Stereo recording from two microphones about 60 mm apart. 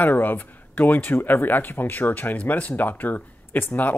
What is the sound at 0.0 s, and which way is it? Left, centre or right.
Speech, left.